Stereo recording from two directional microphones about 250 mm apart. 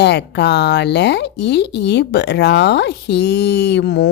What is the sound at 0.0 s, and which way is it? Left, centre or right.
Speech, left.